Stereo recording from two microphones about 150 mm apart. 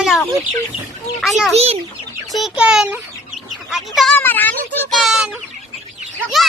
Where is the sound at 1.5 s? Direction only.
40° right (ahead or behind).